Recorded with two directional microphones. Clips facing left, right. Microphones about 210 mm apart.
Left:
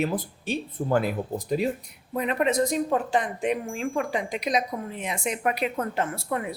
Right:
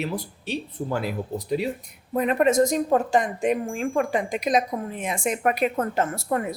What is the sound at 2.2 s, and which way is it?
Speech, 45° right (ahead or behind).